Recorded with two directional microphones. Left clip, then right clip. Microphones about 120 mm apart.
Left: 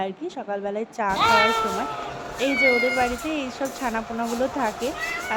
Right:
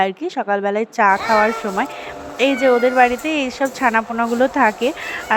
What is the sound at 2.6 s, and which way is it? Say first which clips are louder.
A woman's voice: right 8 dB; 40° right (ahead or behind).